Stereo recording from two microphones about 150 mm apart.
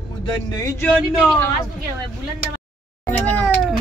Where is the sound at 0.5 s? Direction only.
20° left (ahead or behind).